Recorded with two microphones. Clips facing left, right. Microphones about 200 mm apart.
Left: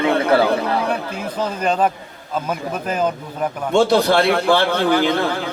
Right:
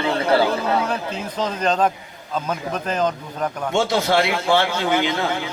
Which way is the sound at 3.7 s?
60° left (ahead or behind).